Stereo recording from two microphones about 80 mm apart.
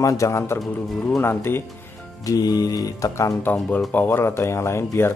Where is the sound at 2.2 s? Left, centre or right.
Left.